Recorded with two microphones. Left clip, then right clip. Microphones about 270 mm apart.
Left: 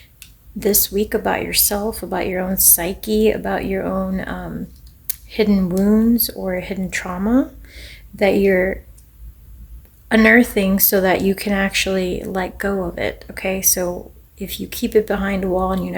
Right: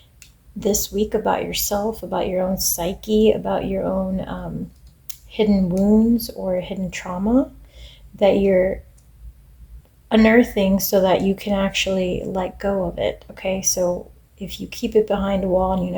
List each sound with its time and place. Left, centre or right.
0.6 s speech: left
10.1 s speech: left